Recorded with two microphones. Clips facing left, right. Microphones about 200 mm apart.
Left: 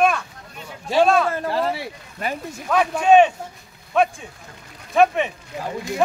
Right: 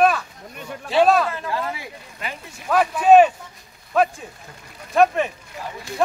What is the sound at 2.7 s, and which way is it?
Speech, 5° right (ahead or behind).